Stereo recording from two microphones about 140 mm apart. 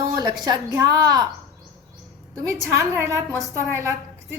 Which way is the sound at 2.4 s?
20° right (ahead or behind).